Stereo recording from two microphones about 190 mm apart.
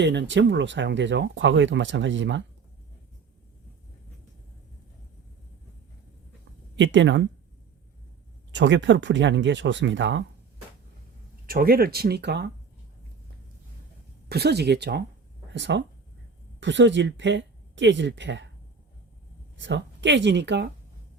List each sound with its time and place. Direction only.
0.0 s speech: 65° right (ahead or behind)
6.7 s speech: 75° right (ahead or behind)
8.5 s speech: 70° right (ahead or behind)
11.4 s speech: 50° right (ahead or behind)
14.3 s speech: 60° right (ahead or behind)
19.5 s speech: 70° right (ahead or behind)